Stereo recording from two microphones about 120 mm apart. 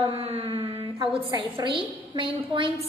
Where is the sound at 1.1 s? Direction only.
40° right (ahead or behind).